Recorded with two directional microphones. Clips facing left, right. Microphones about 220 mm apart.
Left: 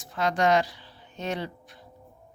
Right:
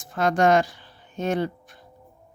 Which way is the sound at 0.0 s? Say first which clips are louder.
Right 4 dB; 50° right (ahead or behind).